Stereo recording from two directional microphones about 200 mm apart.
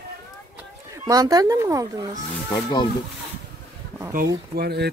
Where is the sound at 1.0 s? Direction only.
20° right (ahead or behind).